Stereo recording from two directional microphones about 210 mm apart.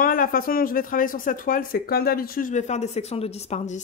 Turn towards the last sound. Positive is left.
turn(degrees=30)  # may be behind; listen again after turning